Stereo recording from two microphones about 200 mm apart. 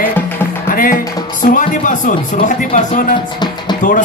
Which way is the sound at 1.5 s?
40° left (ahead or behind).